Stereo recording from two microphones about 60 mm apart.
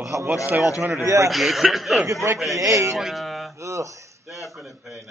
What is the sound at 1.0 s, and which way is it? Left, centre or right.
Speech, right.